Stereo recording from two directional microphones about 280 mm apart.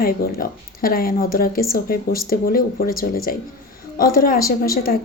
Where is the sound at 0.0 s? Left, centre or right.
Left.